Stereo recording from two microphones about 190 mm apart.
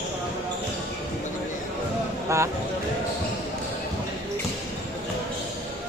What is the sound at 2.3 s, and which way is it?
Speech, 15° right (ahead or behind).